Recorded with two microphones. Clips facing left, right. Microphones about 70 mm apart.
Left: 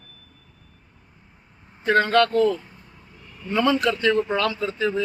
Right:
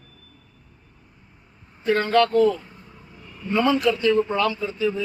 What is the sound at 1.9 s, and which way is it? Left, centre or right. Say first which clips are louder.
Speech: left 1 dB; left.